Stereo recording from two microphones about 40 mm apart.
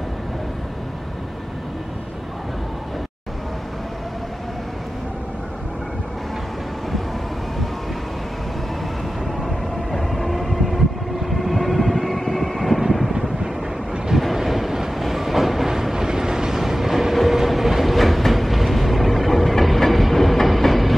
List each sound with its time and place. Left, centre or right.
9.4 s train: centre
11.2 s vehicle: centre
14.1 s vehicle: centre
15.0 s train: centre